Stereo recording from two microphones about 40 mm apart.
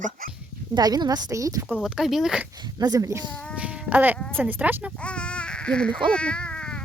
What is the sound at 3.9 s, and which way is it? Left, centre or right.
Speech, right.